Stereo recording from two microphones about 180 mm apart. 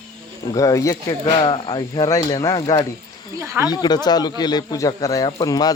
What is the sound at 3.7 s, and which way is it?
Speech, 20° left (ahead or behind).